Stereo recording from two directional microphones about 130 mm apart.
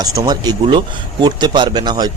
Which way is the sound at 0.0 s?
30° right (ahead or behind).